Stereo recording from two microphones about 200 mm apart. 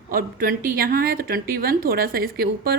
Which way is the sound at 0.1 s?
45° right (ahead or behind).